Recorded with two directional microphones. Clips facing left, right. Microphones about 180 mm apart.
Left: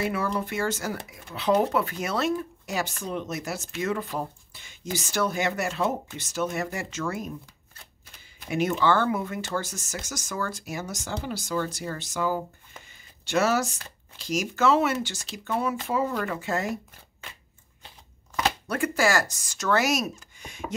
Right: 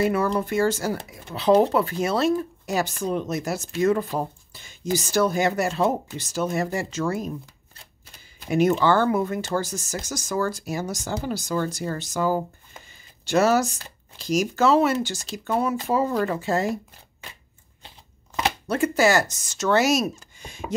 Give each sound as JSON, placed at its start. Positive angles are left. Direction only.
{"t": 0.0, "sound": "speech", "side_deg": -40}
{"t": 8.5, "sound": "speech", "side_deg": -40}
{"t": 17.8, "sound": "speech", "side_deg": -25}